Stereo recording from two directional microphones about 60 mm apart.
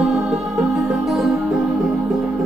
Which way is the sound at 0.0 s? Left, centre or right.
Centre.